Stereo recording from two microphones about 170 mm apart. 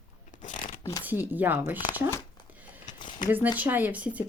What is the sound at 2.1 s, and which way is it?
Crumpling, 20° left (ahead or behind).